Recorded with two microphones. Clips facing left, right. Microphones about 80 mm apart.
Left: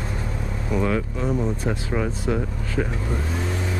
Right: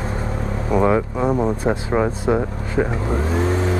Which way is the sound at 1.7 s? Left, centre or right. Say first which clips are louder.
Right 6 dB; right.